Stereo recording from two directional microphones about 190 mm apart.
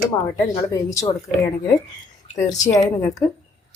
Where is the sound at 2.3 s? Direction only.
20° left (ahead or behind).